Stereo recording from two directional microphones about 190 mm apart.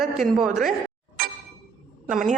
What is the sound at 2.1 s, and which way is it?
Speech, 45° right (ahead or behind).